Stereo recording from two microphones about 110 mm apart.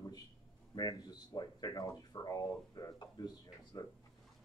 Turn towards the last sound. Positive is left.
turn(degrees=35)  # may be behind; listen again after turning